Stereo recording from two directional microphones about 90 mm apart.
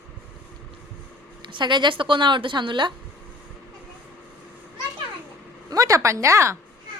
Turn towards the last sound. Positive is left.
turn(degrees=-35)  # may be behind; listen again after turning